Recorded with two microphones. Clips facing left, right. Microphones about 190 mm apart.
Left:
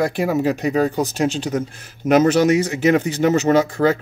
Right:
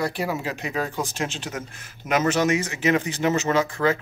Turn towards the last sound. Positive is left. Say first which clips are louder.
# left 6 dB
turn(degrees=35)  # may be behind; listen again after turning